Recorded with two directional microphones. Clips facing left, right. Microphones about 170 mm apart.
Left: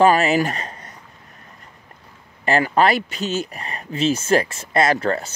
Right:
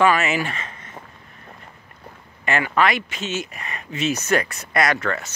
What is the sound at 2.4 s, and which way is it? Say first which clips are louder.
Speech: left 3 dB; 35° left (ahead or behind).